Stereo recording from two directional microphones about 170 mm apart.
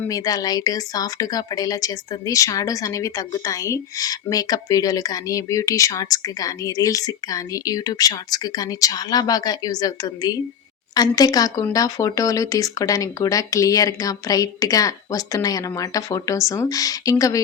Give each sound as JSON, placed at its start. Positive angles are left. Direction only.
{"t": 0.1, "sound": "speech", "side_deg": 20}